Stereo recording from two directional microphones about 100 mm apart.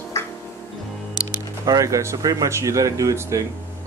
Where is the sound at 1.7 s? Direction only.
30° right (ahead or behind).